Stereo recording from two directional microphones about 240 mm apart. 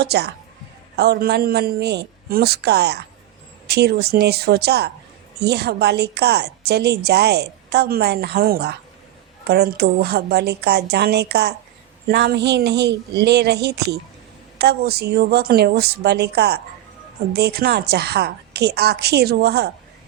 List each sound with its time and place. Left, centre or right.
0.0 s a woman's voice: right